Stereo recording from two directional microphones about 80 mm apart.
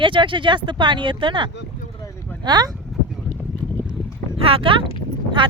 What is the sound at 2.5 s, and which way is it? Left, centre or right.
Speech, right.